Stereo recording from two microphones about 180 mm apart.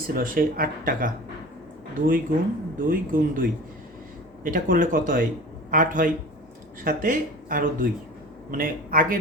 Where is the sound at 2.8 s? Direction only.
50° right (ahead or behind).